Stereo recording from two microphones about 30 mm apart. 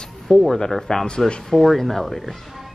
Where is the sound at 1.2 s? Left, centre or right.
Centre.